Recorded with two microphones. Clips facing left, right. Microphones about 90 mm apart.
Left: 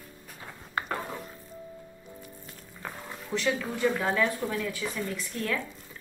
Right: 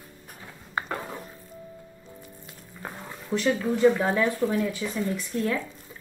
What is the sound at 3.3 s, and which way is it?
Speech, 40° right (ahead or behind).